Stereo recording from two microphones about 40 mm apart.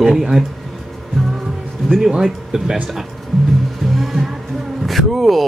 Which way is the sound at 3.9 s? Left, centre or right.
Centre.